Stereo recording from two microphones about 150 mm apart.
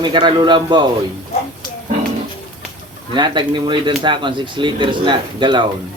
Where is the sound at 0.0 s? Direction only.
30° right (ahead or behind).